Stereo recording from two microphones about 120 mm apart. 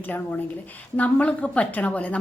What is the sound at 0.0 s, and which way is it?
A woman's voice, 15° left (ahead or behind).